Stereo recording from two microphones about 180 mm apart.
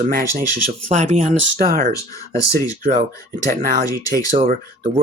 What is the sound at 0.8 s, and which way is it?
Speech, 40° right (ahead or behind).